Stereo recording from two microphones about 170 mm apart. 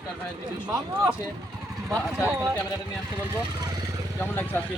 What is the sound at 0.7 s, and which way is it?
Speech, 15° right (ahead or behind).